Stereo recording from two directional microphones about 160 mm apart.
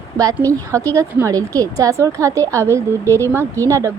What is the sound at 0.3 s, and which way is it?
Speech, 20° right (ahead or behind).